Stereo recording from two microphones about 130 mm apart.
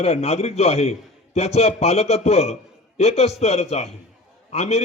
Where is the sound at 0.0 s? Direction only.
50° left (ahead or behind).